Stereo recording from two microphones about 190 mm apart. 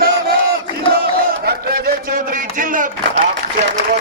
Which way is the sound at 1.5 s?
50° right (ahead or behind).